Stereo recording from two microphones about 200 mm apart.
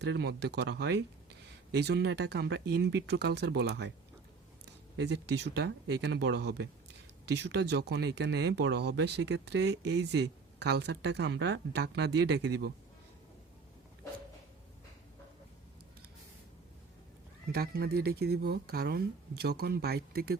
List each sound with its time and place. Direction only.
0.0 s speech: 60° right (ahead or behind)
4.9 s speech: 60° right (ahead or behind)
17.5 s speech: 50° right (ahead or behind)